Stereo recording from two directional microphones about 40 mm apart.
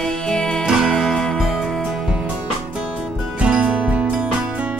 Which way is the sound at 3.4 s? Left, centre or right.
Right.